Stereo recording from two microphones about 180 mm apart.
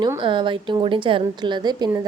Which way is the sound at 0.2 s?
25° right (ahead or behind).